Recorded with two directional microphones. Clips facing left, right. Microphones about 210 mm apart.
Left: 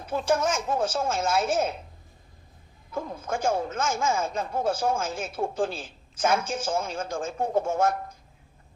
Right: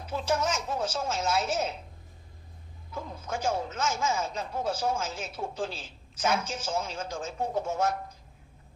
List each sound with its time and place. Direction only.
0.0 s speech: 50° left (ahead or behind)
2.9 s speech: 50° left (ahead or behind)